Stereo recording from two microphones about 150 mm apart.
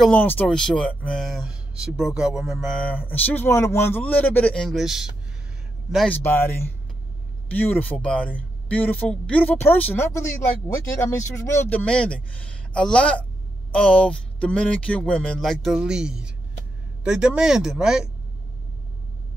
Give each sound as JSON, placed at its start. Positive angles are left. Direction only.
{"t": 0.0, "sound": "speech", "side_deg": 10}
{"t": 6.1, "sound": "a man's voice", "side_deg": 15}
{"t": 11.8, "sound": "a man's voice", "side_deg": 5}